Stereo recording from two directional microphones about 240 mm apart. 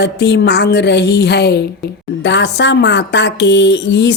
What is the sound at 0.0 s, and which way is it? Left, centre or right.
A woman's voice, left.